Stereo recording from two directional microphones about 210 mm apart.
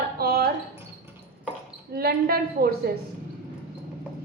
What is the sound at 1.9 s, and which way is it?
Speech, 50° right (ahead or behind).